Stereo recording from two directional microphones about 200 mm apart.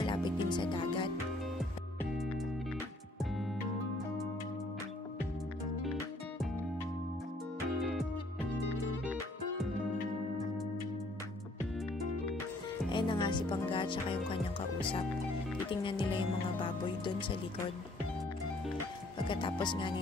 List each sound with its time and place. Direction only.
0.0 s music: 25° left (ahead or behind)
12.9 s speech: 25° left (ahead or behind)
19.2 s speech: 25° left (ahead or behind)